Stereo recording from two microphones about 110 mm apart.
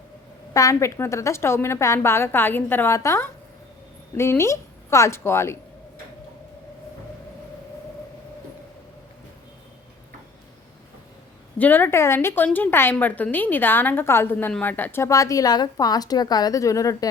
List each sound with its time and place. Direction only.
0.5 s a woman's voice: 30° left (ahead or behind)
11.5 s a woman's voice: 15° left (ahead or behind); by 17.1 s 30° left (ahead or behind)